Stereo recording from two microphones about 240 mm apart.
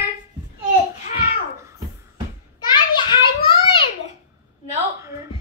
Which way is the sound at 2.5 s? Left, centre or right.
Centre.